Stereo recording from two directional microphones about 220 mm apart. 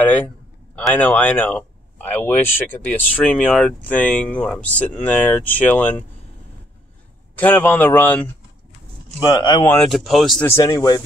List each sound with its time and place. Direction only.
0.7 s speech: 5° left (ahead or behind)
7.3 s speech: 10° left (ahead or behind)
9.2 s speech: 20° left (ahead or behind)
9.8 s speech: centre (ahead or behind)
10.4 s speech: 15° left (ahead or behind)